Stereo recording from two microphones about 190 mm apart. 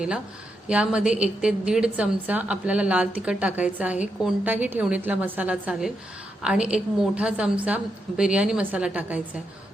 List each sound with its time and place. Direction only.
0.7 s a woman's voice: 5° right (ahead or behind)